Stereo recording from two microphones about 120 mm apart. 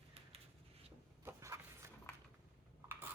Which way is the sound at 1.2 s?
25° right (ahead or behind).